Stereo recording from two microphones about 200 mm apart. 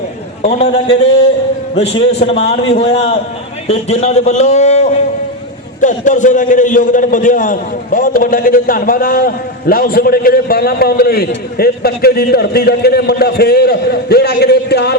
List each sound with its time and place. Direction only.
0.4 s a man's voice: 35° left (ahead or behind); by 14.9 s 55° left (ahead or behind)